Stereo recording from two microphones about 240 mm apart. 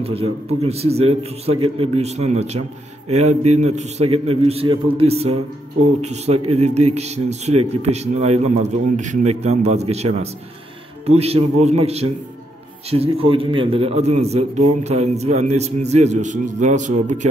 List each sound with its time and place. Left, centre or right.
0.0 s a man's voice: right